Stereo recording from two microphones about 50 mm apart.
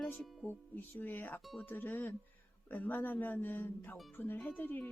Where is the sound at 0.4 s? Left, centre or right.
Left.